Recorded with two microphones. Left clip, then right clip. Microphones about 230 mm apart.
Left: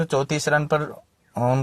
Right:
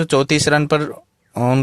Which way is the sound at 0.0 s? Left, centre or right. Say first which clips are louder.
Right 7 dB; right.